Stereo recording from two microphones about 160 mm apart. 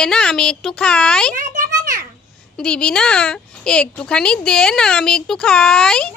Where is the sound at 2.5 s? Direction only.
5° left (ahead or behind).